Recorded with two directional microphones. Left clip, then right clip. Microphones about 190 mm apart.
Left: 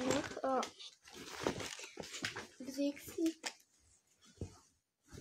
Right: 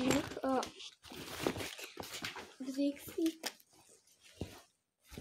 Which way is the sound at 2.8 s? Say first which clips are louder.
Right 2 dB; 35° right (ahead or behind).